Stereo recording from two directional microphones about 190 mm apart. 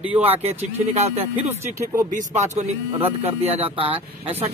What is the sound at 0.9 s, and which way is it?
Speech, 35° right (ahead or behind).